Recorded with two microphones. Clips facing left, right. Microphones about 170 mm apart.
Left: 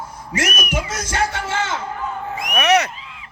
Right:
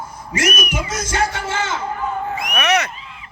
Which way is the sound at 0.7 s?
65° left (ahead or behind).